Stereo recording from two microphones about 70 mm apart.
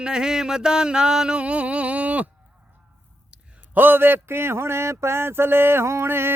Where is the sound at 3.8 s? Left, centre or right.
Right.